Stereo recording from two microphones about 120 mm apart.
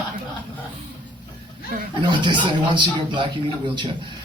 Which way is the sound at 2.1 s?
40° right (ahead or behind).